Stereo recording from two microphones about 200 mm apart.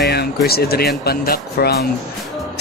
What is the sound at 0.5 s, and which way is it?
Speech, 50° left (ahead or behind).